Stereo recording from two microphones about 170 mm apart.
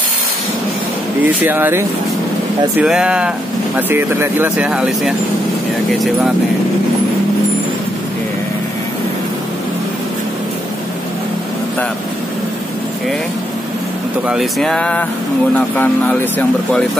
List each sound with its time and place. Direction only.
1.2 s speech: 10° right (ahead or behind)
14.2 s speech: centre (ahead or behind)